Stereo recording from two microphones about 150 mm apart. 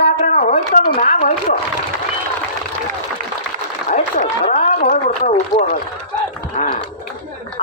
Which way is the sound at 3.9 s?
55° left (ahead or behind).